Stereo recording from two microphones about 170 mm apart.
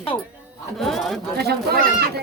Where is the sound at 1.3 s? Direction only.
70° right (ahead or behind).